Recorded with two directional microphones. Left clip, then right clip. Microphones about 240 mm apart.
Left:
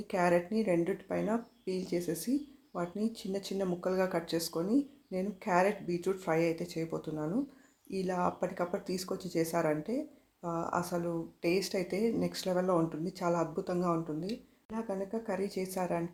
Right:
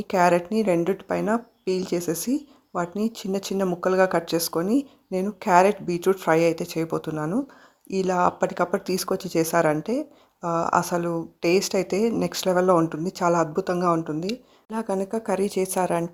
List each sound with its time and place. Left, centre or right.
0.1 s a woman's voice: right